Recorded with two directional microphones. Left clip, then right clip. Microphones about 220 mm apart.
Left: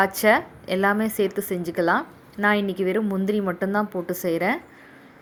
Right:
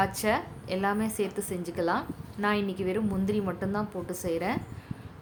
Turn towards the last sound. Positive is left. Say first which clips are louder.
# left 7 dB
turn(degrees=25)  # may be behind; listen again after turning